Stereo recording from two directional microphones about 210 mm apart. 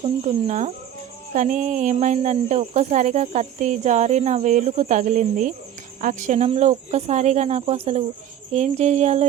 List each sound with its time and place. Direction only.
0.0 s speech: 35° right (ahead or behind)